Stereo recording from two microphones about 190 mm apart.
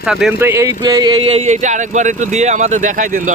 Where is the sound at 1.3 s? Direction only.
40° right (ahead or behind).